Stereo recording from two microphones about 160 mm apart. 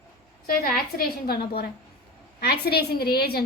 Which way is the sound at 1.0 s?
75° left (ahead or behind).